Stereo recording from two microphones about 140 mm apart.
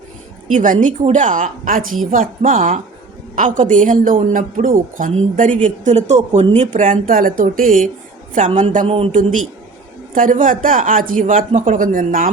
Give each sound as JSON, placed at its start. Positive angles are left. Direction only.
{"t": 0.5, "sound": "speech", "side_deg": -65}
{"t": 5.6, "sound": "speech", "side_deg": -60}
{"t": 8.4, "sound": "speech", "side_deg": -55}
{"t": 10.2, "sound": "speech", "side_deg": -70}